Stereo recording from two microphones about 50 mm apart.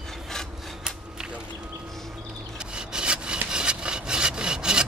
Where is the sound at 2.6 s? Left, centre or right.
Centre.